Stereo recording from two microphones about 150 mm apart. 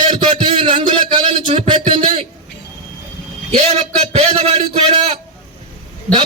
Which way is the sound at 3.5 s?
45° right (ahead or behind).